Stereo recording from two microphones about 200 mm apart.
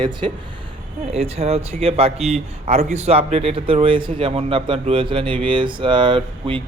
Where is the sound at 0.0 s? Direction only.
20° right (ahead or behind).